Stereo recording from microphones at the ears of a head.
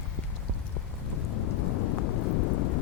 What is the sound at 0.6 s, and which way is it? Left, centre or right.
Rain, left.